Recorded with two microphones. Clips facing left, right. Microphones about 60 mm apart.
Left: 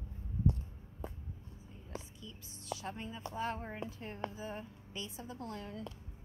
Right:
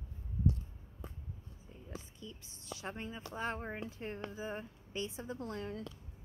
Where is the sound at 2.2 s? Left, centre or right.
Right.